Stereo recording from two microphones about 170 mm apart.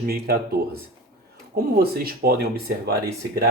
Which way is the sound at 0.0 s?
65° right (ahead or behind).